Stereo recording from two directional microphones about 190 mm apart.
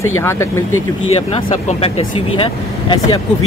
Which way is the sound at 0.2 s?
15° left (ahead or behind).